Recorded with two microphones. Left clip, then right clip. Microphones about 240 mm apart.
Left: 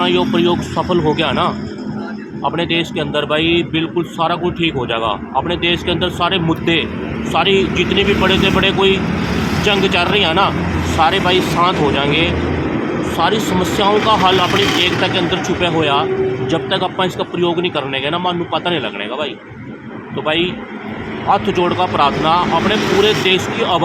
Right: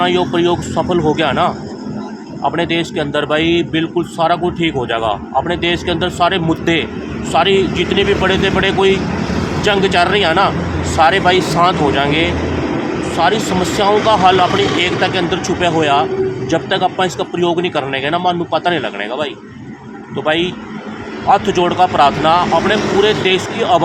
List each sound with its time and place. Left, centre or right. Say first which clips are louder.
0.0 s speech: right 1 dB; centre